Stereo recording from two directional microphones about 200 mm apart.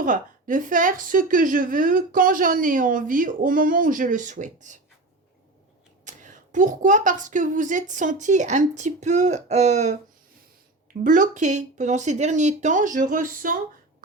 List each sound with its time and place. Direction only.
0.0 s a woman's voice: 40° right (ahead or behind)
6.1 s a woman's voice: 40° right (ahead or behind)
11.0 s a woman's voice: 40° right (ahead or behind)